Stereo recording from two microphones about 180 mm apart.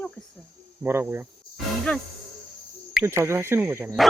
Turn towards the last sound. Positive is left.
turn(degrees=-10)  # may be behind; listen again after turning